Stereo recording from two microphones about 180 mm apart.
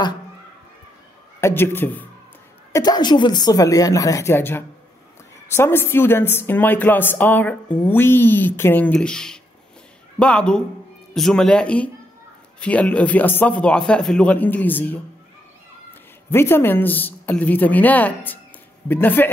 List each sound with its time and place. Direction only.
1.4 s a man's voice: 10° left (ahead or behind)
2.7 s a woman's voice: 20° left (ahead or behind)